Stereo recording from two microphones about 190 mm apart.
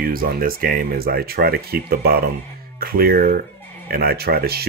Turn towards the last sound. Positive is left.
turn(degrees=-55)  # may be behind; listen again after turning